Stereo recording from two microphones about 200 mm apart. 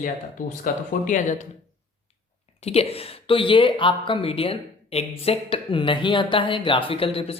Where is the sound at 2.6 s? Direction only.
30° left (ahead or behind).